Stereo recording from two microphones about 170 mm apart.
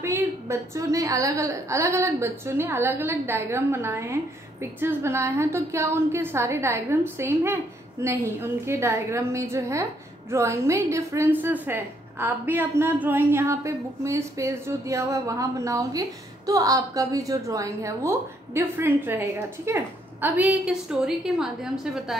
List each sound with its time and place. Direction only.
0.0 s a woman's voice: 15° right (ahead or behind)